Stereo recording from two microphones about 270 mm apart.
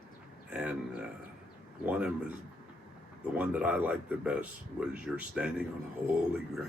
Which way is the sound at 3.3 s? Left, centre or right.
Centre.